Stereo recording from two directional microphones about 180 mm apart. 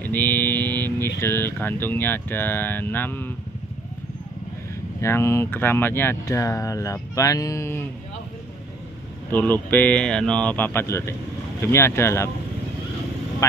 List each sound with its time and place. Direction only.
0.0 s speech: 10° left (ahead or behind)
5.0 s speech: 15° left (ahead or behind)
9.3 s speech: 10° left (ahead or behind)
13.4 s speech: 15° left (ahead or behind)